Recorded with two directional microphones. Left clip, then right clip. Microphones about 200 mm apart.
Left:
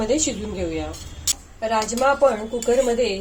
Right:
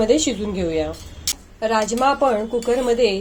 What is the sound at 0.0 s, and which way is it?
A woman's voice, 40° right (ahead or behind).